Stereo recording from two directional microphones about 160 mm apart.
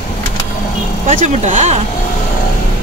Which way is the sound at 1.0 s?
45° right (ahead or behind).